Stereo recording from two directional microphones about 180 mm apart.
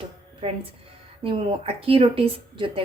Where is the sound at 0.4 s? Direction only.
35° right (ahead or behind).